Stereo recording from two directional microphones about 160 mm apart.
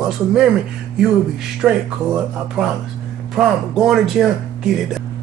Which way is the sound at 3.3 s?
Centre (ahead or behind).